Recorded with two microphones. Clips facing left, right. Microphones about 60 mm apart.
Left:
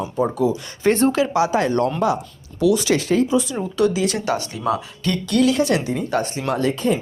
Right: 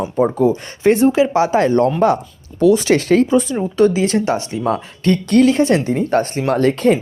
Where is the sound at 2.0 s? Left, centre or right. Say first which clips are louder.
Right 5 dB; right.